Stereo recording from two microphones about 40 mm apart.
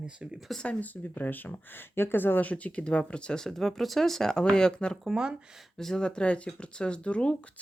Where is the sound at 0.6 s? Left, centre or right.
Left.